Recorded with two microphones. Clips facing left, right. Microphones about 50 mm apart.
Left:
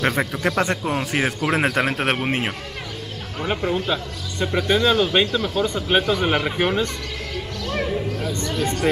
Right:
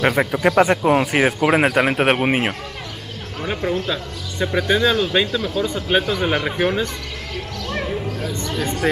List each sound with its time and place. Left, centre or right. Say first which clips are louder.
0.0 s a man's voice: right 4 dB; centre
3.3 s speech: even; centre
4.5 s speech: right 1 dB; centre
7.7 s music: left 1 dB; centre
8.8 s speech: right 1 dB; centre